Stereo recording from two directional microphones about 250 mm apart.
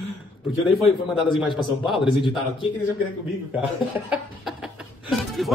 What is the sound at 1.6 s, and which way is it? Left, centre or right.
Speech, centre.